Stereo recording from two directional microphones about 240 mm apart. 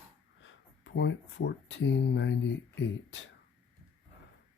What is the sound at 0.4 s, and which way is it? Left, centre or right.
Speech, left.